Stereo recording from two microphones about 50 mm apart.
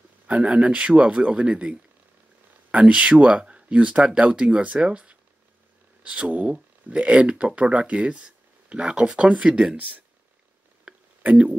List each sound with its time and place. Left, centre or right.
0.3 s speech: right
11.2 s speech: right